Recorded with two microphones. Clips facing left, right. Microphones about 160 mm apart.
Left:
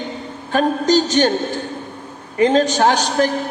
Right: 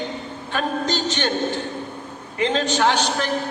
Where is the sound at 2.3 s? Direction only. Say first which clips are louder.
Left 7 dB; 40° left (ahead or behind).